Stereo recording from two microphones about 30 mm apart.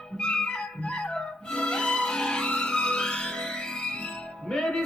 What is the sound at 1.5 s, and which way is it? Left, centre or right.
Music, left.